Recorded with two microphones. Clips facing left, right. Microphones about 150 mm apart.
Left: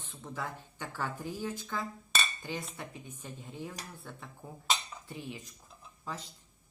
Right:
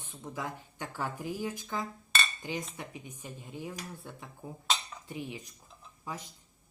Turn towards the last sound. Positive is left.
turn(degrees=-15)  # may be behind; listen again after turning